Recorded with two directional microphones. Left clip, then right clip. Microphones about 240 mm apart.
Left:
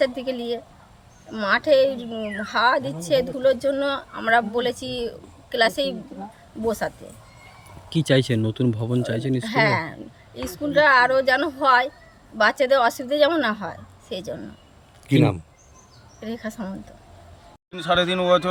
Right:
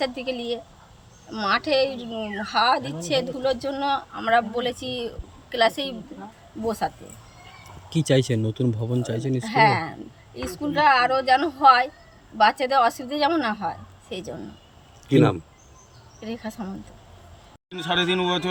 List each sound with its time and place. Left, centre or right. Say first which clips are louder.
0.0 s speech: left 4 dB; centre
15.1 s speech: right 1 dB; left
16.2 s speech: left 2 dB; centre
17.7 s a man's voice: left 2 dB; centre